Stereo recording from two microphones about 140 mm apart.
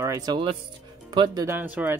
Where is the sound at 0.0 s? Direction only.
25° right (ahead or behind).